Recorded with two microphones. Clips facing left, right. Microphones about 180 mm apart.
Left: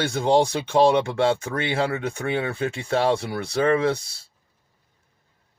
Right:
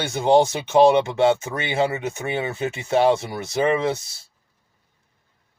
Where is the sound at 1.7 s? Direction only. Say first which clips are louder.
Right 4 dB; 20° right (ahead or behind).